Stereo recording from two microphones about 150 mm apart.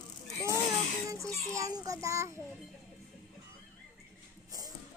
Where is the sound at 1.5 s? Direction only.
20° right (ahead or behind).